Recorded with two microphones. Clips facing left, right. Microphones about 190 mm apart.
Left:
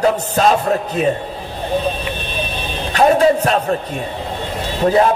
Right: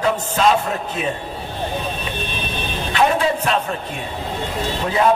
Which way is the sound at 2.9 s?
40° left (ahead or behind).